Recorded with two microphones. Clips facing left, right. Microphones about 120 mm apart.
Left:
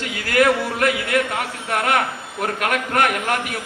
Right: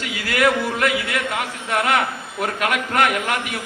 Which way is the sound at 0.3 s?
45° left (ahead or behind).